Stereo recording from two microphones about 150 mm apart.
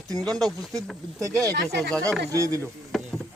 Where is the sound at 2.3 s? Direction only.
20° right (ahead or behind).